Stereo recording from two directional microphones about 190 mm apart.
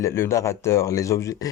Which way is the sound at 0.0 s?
15° left (ahead or behind).